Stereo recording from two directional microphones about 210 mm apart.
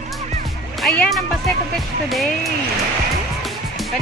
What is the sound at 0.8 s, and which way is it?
Speech, centre (ahead or behind).